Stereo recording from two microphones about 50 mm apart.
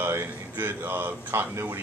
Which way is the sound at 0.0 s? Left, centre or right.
Right.